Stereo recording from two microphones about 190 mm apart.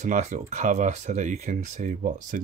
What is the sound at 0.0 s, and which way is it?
Speech, 40° right (ahead or behind).